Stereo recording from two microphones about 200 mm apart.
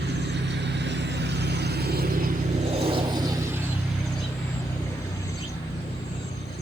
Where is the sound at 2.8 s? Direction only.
25° right (ahead or behind).